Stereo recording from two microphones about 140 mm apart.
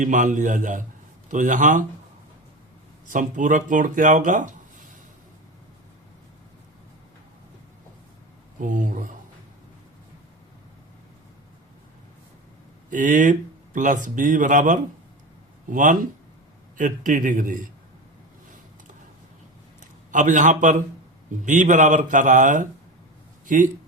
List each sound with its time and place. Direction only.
0.0 s speech: 65° right (ahead or behind)
3.1 s speech: 70° right (ahead or behind)
8.5 s speech: 65° right (ahead or behind)
12.9 s speech: 65° right (ahead or behind)
20.1 s speech: 65° right (ahead or behind)